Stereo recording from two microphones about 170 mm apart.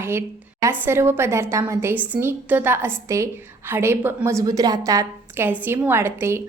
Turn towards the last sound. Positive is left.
turn(degrees=-15)  # may be behind; listen again after turning